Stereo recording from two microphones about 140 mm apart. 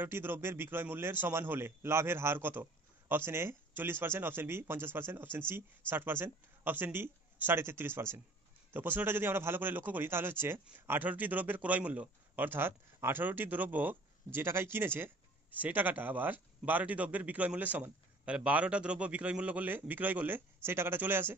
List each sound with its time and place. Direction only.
0.0 s a man's voice: 15° right (ahead or behind)